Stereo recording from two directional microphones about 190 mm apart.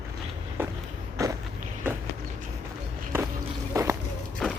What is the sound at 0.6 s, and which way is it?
Walk, 10° right (ahead or behind).